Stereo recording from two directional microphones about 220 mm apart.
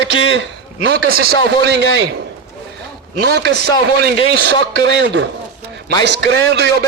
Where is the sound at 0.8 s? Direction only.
45° right (ahead or behind).